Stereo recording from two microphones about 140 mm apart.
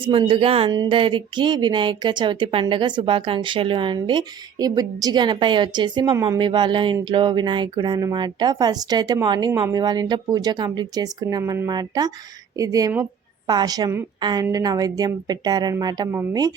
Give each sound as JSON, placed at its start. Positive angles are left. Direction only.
{"t": 0.0, "sound": "speech", "side_deg": -40}
{"t": 9.5, "sound": "speech", "side_deg": -15}
{"t": 9.7, "sound": "speech", "side_deg": -30}